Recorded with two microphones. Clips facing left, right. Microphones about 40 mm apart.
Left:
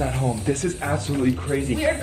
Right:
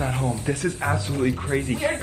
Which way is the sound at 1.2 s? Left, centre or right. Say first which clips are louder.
Even; right.